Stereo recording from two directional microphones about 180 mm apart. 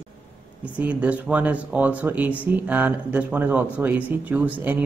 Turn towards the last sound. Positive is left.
turn(degrees=-10)  # may be behind; listen again after turning